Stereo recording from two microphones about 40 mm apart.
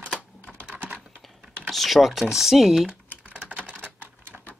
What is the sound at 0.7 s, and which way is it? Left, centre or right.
Typing, right.